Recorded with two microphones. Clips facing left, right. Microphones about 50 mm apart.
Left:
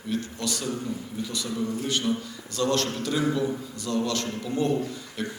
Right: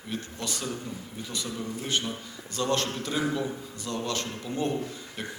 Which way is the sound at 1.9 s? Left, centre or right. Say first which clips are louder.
Left 4 dB; right.